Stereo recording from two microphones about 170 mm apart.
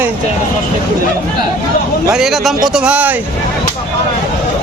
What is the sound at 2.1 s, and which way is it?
A man's voice, centre (ahead or behind).